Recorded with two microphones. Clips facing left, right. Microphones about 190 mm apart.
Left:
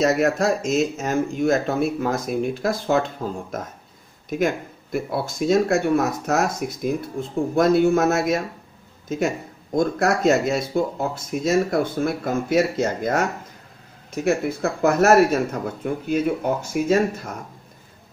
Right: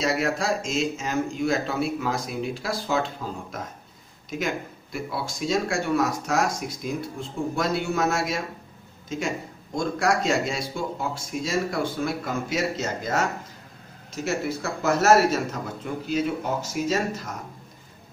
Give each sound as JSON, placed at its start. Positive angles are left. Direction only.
{"t": 0.0, "sound": "speech", "side_deg": 45}
{"t": 4.3, "sound": "speech", "side_deg": 50}
{"t": 9.8, "sound": "a man's voice", "side_deg": 55}